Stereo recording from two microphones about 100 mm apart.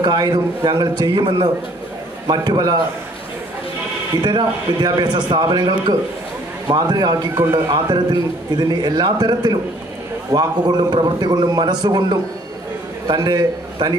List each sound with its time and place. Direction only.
0.0 s a man's voice: 45° right (ahead or behind)
4.2 s a man's voice: 45° right (ahead or behind)